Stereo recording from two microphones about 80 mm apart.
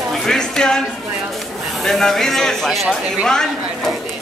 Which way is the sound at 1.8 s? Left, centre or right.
Centre.